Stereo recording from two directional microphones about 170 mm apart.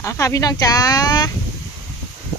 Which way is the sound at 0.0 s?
15° left (ahead or behind).